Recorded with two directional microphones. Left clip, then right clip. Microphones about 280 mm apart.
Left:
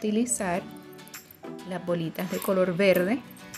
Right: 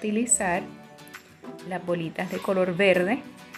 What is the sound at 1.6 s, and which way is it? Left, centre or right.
A woman's voice, centre.